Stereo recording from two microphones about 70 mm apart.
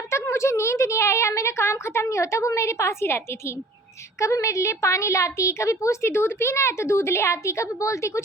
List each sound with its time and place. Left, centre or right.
0.1 s a woman's voice: left